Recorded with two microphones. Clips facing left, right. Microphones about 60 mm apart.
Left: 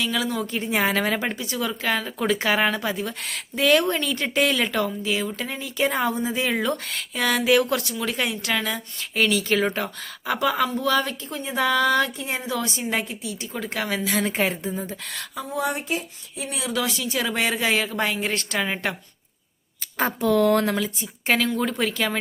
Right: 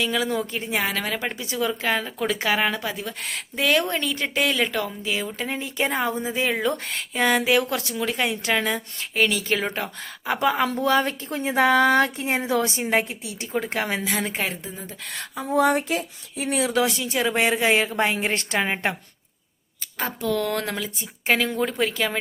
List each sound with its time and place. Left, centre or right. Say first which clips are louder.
0.0 s speech: right 1 dB; centre
0.7 s speech: left 4 dB; centre
1.4 s speech: right 2 dB; centre
10.3 s a woman's voice: right 1 dB; right
14.0 s speech: left 3 dB; centre
14.6 s speech: left 7 dB; centre
15.5 s speech: right 6 dB; right
16.4 s speech: right 5 dB; right
16.8 s a woman's voice: right 3 dB; centre
20.0 s speech: left 5 dB; centre